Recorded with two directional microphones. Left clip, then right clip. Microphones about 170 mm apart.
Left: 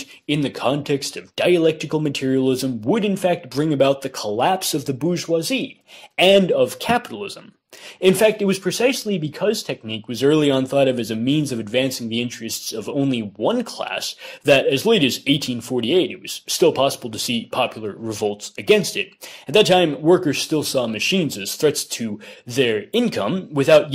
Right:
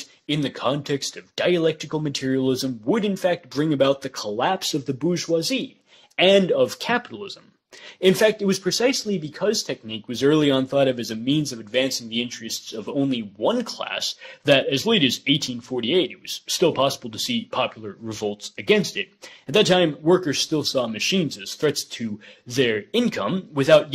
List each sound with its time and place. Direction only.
0.3 s speech: 30° left (ahead or behind)